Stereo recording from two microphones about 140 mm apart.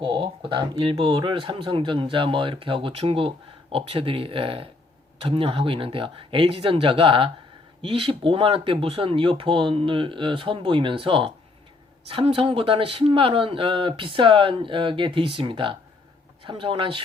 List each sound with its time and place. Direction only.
0.0 s speech: 35° right (ahead or behind)